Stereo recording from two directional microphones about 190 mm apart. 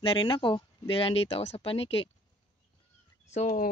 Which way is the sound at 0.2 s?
25° left (ahead or behind).